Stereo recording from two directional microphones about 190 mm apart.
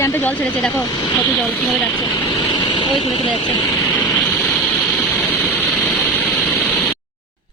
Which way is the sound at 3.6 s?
10° left (ahead or behind).